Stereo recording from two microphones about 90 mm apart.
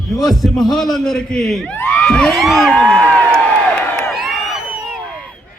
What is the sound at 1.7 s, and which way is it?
Crowd, 20° left (ahead or behind).